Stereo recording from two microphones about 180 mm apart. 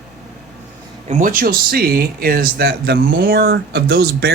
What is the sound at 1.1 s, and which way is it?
Speech, 45° right (ahead or behind).